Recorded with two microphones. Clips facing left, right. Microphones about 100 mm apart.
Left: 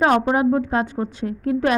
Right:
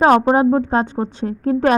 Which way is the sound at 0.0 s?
30° right (ahead or behind).